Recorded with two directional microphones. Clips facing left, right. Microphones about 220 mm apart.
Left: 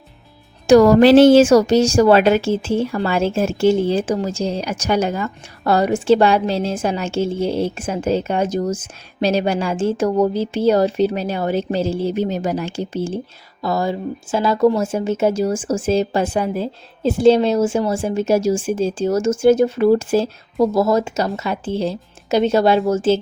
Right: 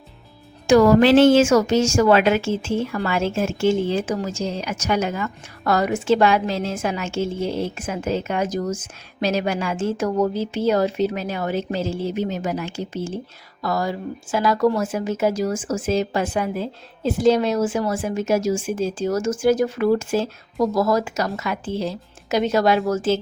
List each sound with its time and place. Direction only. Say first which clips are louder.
0.7 s a woman's voice: left 4 dB; 35° left (ahead or behind)